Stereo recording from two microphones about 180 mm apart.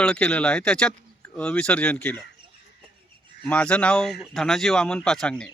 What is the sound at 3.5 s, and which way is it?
A man's voice, 5° left (ahead or behind).